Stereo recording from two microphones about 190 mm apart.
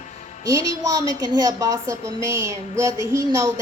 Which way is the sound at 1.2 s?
20° right (ahead or behind).